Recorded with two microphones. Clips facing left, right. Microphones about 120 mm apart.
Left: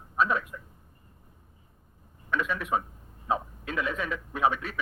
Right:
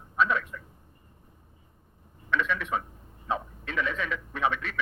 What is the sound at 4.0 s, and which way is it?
Speech, 35° left (ahead or behind).